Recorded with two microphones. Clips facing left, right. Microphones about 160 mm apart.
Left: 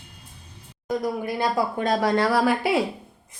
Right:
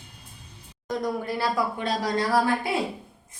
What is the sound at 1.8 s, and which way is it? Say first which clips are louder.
Speech: left 5 dB; 50° left (ahead or behind).